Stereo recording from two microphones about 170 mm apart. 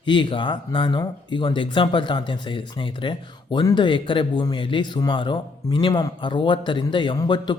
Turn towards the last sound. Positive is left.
turn(degrees=25)  # may be behind; listen again after turning